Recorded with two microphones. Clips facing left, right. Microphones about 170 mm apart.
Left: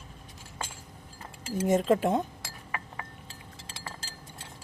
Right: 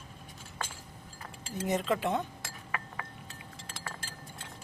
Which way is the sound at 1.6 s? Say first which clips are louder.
Left 6 dB; 45° left (ahead or behind).